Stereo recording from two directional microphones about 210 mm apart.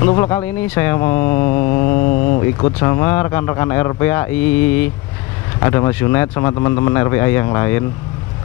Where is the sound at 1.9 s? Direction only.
40° left (ahead or behind).